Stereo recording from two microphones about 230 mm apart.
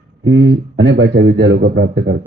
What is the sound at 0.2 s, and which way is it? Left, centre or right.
A man's voice, right.